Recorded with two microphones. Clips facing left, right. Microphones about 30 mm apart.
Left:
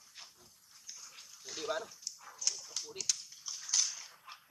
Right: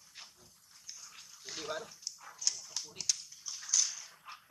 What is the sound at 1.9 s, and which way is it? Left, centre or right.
Dog, centre.